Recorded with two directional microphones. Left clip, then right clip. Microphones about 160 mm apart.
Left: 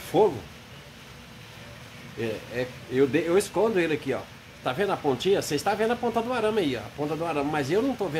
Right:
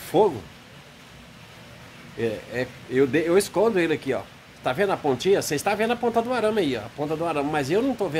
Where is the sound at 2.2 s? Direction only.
40° right (ahead or behind).